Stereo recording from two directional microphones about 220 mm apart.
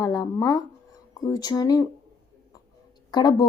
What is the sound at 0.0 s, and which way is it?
Speech, 15° left (ahead or behind).